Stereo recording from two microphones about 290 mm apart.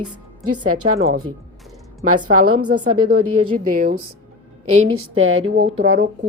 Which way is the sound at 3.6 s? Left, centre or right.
Right.